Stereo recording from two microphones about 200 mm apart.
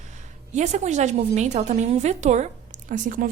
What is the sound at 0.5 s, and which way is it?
A woman's voice, 35° right (ahead or behind).